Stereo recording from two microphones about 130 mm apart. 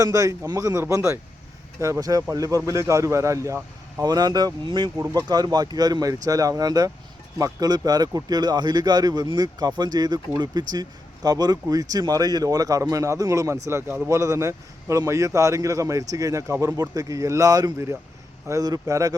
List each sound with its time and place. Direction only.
0.0 s a man's voice: 25° right (ahead or behind)